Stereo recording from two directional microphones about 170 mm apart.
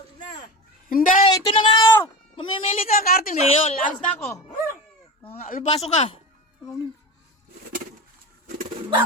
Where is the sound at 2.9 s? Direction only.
60° left (ahead or behind).